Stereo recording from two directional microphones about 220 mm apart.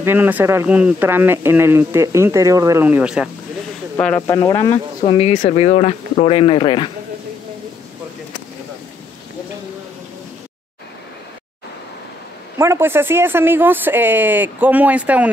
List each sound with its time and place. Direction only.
0.0 s speech: 10° right (ahead or behind)
4.0 s speech: 10° left (ahead or behind)
12.5 s speech: 10° right (ahead or behind)